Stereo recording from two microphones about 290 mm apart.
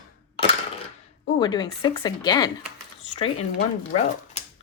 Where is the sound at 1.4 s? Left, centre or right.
Centre.